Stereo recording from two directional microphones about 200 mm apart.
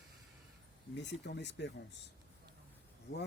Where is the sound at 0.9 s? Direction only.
60° left (ahead or behind).